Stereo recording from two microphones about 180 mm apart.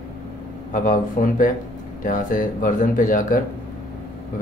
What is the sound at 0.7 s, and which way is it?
Speech, 50° left (ahead or behind).